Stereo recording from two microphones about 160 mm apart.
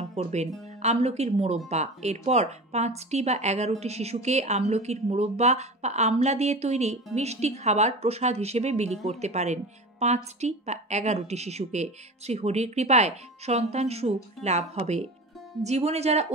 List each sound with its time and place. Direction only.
0.1 s a woman's voice: 45° right (ahead or behind)